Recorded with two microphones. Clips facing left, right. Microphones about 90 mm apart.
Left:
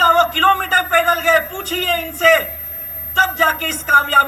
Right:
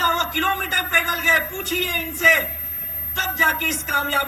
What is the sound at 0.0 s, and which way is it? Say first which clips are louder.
A man's voice: left 8 dB; 50° left (ahead or behind).